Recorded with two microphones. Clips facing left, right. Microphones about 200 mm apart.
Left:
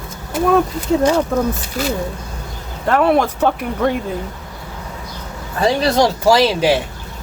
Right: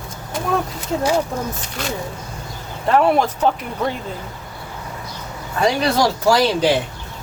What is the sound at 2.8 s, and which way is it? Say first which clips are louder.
Speech: left 1 dB; 65° left (ahead or behind).